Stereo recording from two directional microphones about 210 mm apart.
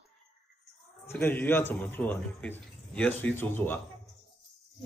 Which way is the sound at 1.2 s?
10° left (ahead or behind).